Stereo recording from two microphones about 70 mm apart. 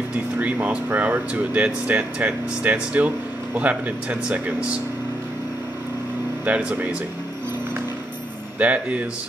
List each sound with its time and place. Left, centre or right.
0.4 s speech: right
6.4 s speech: right
8.5 s speech: centre